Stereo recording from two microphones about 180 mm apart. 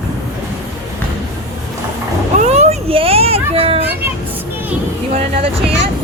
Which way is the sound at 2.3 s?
35° right (ahead or behind).